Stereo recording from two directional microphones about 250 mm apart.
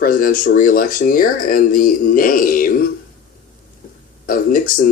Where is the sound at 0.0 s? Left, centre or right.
Left.